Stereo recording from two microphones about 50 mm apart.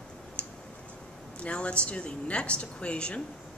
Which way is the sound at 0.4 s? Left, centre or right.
Left.